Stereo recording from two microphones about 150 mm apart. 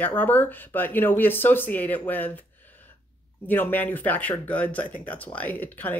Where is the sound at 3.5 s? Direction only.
10° left (ahead or behind).